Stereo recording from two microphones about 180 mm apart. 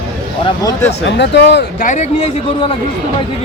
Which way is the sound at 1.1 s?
70° left (ahead or behind).